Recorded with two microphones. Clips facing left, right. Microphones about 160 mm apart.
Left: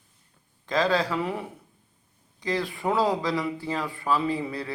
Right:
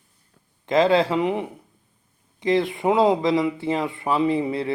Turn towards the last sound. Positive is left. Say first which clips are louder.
# right 7 dB
turn(degrees=-25)  # may be behind; listen again after turning